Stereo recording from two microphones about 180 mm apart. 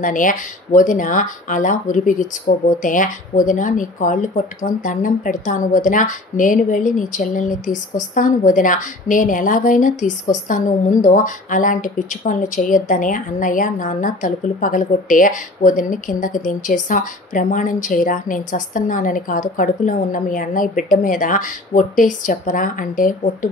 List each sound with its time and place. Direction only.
0.0 s a woman's voice: 45° left (ahead or behind)